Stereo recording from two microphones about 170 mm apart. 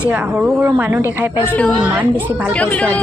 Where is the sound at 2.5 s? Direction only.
5° left (ahead or behind).